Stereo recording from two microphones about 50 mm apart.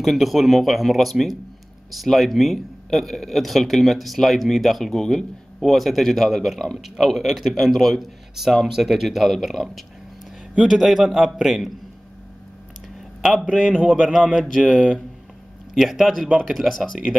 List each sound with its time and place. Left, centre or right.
0.0 s speech: centre
13.2 s a man's voice: centre
13.7 s speech: centre
14.3 s speech: centre
15.7 s speech: centre